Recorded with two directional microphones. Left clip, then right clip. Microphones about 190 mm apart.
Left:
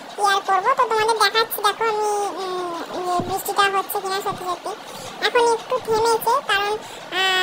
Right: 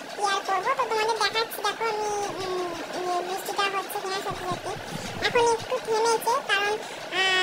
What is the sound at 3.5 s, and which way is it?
Speech, 30° left (ahead or behind).